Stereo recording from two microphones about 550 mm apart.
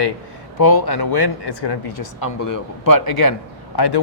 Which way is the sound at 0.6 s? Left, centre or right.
Left.